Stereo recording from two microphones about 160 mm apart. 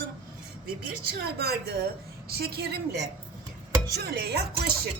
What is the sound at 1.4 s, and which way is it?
A woman's voice, 85° right.